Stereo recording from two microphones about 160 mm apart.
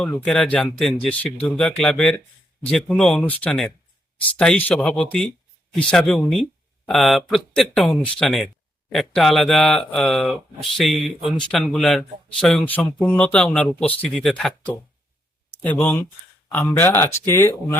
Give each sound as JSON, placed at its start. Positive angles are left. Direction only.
{"t": 0.0, "sound": "speech", "side_deg": 5}
{"t": 15.6, "sound": "speech", "side_deg": 10}